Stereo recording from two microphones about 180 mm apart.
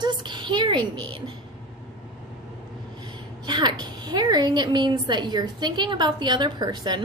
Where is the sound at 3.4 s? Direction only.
25° right (ahead or behind).